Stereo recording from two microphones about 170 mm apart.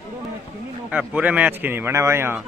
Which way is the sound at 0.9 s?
10° right (ahead or behind).